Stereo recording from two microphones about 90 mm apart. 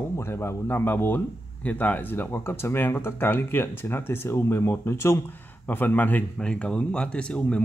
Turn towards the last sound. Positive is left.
turn(degrees=15)  # may be behind; listen again after turning